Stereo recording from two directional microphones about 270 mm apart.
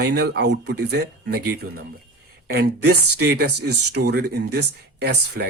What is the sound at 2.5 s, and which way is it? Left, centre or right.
Speech, right.